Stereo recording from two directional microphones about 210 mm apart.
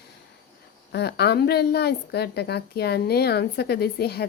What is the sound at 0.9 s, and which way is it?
A woman's voice, 50° left (ahead or behind).